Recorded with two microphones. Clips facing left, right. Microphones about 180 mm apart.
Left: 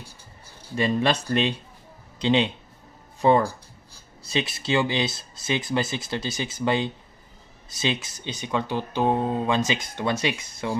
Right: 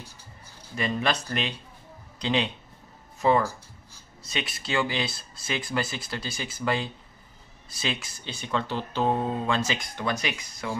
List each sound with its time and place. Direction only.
0.7 s speech: 30° left (ahead or behind)